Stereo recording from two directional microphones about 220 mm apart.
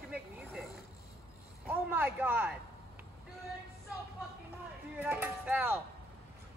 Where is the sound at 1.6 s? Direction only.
10° right (ahead or behind).